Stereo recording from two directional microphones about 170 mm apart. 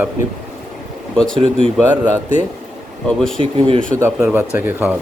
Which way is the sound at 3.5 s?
30° right (ahead or behind).